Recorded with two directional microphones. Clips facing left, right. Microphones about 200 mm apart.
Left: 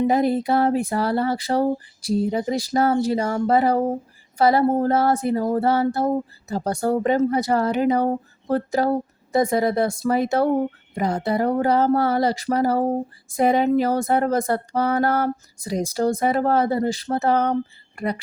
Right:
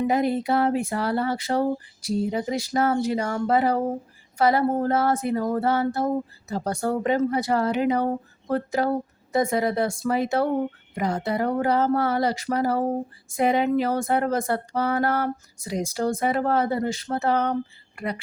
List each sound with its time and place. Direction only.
0.0 s speech: 35° left (ahead or behind)
10.9 s speech: 30° left (ahead or behind)